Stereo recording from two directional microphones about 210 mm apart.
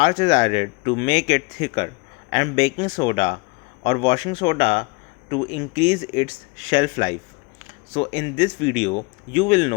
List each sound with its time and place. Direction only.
0.0 s speech: 25° left (ahead or behind)